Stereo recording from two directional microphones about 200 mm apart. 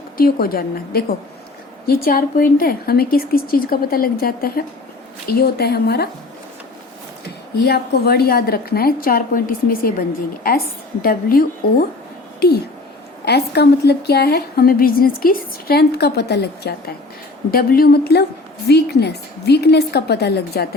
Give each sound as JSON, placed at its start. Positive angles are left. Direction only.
{"t": 0.2, "sound": "a woman's voice", "side_deg": 45}
{"t": 7.6, "sound": "a woman's voice", "side_deg": 50}